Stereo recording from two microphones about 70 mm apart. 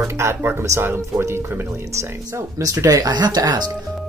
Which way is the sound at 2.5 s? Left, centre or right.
Right.